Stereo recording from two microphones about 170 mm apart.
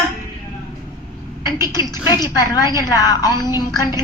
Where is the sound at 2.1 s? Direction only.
20° left (ahead or behind).